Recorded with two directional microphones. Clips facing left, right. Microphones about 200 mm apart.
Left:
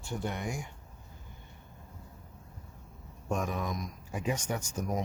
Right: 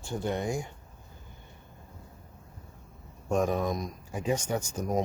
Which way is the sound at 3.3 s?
35° right (ahead or behind).